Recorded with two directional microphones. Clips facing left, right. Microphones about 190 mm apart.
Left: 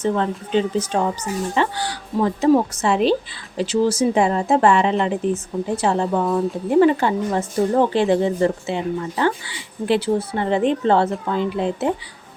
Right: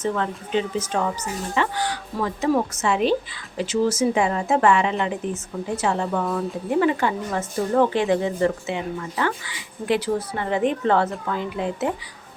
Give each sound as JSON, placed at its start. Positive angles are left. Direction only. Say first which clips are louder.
{"t": 0.0, "sound": "speech", "louder": "left 4 dB", "side_deg": 30}